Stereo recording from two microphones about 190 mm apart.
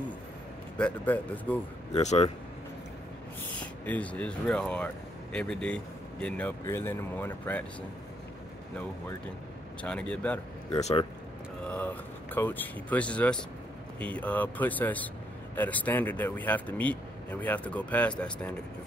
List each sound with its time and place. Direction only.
0.7 s speech: 5° left (ahead or behind)
2.0 s speech: 35° left (ahead or behind)
3.8 s speech: 10° left (ahead or behind)
9.8 s speech: 5° left (ahead or behind)
10.7 s speech: 35° left (ahead or behind)
11.6 s speech: 10° left (ahead or behind)